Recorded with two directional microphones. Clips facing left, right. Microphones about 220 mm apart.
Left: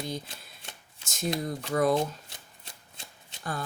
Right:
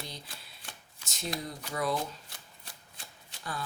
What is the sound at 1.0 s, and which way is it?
Speech, 50° left (ahead or behind).